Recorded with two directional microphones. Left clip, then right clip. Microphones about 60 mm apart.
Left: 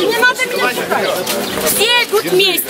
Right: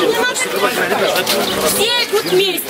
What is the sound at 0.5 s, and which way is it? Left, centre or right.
Speech, left.